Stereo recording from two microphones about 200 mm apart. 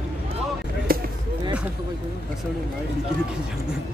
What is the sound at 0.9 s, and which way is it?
Basketball bounce, 45° right (ahead or behind).